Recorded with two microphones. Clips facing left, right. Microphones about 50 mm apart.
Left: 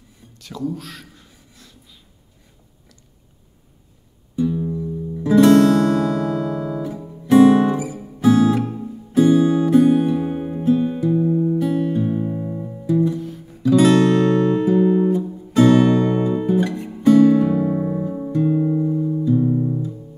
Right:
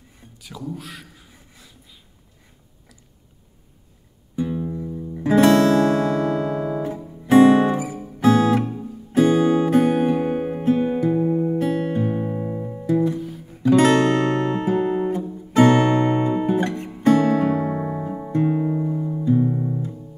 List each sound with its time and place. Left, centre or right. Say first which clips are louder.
0.4 s speech: left 6 dB; centre
1.5 s a sound: left 1 dB; centre
4.4 s music: left 4 dB; right
13.6 s guitar: left 1 dB; right
18.3 s music: left 2 dB; right